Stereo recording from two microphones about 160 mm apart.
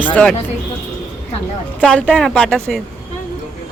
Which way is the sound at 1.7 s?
10° left (ahead or behind).